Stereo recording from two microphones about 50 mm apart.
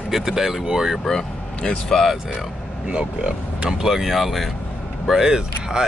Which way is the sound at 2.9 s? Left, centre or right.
Centre.